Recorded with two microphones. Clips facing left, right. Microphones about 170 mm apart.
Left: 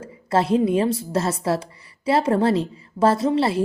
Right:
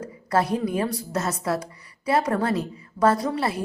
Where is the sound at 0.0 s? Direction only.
25° left (ahead or behind).